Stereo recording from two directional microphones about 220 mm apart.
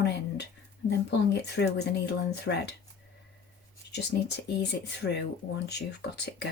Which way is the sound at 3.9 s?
50° left (ahead or behind).